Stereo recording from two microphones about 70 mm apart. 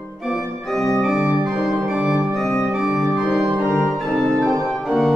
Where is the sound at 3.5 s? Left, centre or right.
Right.